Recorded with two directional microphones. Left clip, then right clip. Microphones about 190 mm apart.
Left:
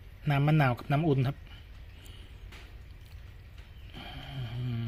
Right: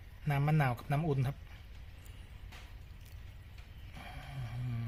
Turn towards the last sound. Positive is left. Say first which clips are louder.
# left 6 dB
turn(degrees=10)  # may be behind; listen again after turning